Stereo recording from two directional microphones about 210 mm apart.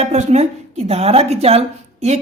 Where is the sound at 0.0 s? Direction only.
30° right (ahead or behind).